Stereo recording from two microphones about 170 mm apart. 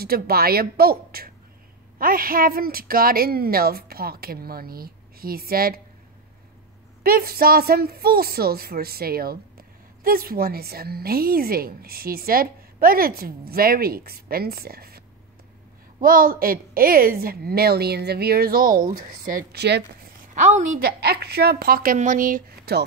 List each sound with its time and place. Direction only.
0.0 s a woman's voice: 65° right (ahead or behind)
7.0 s a woman's voice: 60° right (ahead or behind)
20.3 s a woman's voice: 45° right (ahead or behind)
21.0 s a woman's voice: 70° right (ahead or behind)